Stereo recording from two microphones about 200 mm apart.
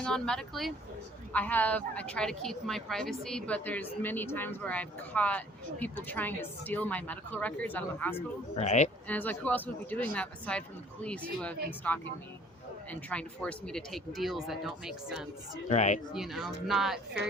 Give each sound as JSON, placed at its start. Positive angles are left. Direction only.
{"t": 0.0, "sound": "a woman's voice", "side_deg": 5}
{"t": 8.5, "sound": "speech", "side_deg": 35}
{"t": 9.0, "sound": "a woman's voice", "side_deg": 10}
{"t": 15.7, "sound": "speech", "side_deg": 35}
{"t": 16.1, "sound": "speech", "side_deg": 0}